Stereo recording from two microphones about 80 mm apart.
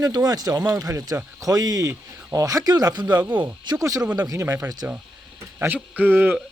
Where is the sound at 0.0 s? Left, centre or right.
Right.